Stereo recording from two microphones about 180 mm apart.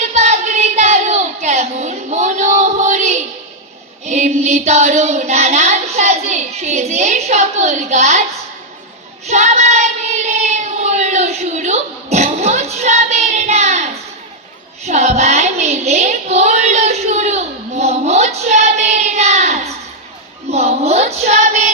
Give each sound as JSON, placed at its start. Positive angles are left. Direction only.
{"t": 0.1, "sound": "a sound", "side_deg": -40}
{"t": 4.0, "sound": "child singing", "side_deg": -40}
{"t": 9.2, "sound": "child singing", "side_deg": -40}